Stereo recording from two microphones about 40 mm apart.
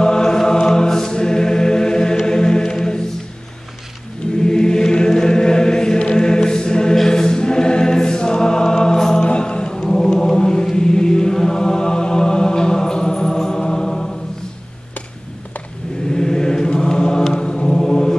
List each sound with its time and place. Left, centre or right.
0.0 s choir: centre
4.4 s choir: centre
9.3 s chant: left
16.1 s chant: centre
17.7 s mantra: centre